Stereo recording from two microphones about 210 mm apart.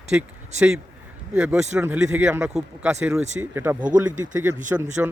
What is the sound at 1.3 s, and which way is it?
A man's voice, 5° right (ahead or behind).